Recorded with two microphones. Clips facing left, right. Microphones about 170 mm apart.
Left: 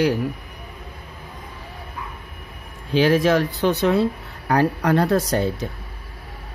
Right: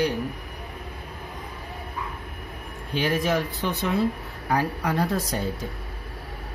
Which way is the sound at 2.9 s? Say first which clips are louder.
Left 7 dB; 90° left.